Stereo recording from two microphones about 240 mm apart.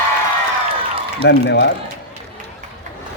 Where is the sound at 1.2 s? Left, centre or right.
Left.